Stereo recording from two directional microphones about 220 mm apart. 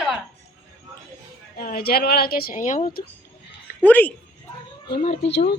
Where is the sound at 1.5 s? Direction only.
45° left (ahead or behind).